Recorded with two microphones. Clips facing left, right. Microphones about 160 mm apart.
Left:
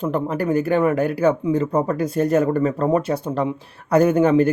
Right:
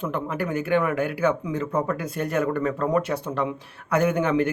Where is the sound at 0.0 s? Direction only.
35° left (ahead or behind).